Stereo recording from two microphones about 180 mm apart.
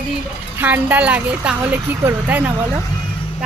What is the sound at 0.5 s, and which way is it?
Speech, 10° right (ahead or behind).